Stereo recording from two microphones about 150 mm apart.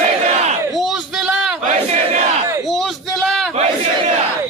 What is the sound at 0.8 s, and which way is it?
Speech, centre (ahead or behind).